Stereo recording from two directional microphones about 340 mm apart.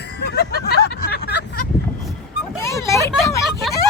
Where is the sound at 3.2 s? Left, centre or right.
Centre.